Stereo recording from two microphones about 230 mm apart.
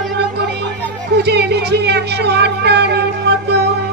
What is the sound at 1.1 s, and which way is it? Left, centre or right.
Speech, right.